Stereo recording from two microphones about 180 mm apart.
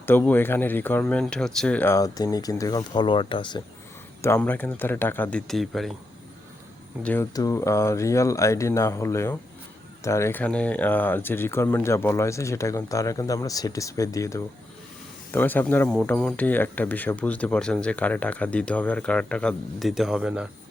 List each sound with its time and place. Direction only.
0.0 s speech: 10° left (ahead or behind); by 3.6 s 25° left (ahead or behind)
4.2 s speech: 10° left (ahead or behind)
7.0 s speech: 10° left (ahead or behind)